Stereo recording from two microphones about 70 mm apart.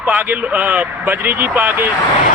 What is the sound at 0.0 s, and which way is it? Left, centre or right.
Speech, right.